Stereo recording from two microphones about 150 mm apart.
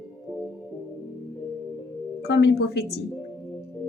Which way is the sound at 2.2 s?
90° left.